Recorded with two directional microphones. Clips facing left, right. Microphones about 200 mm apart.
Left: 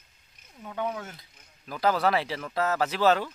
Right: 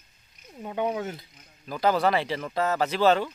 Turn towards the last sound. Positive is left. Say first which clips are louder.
# right 2 dB
turn(degrees=5)  # may be behind; listen again after turning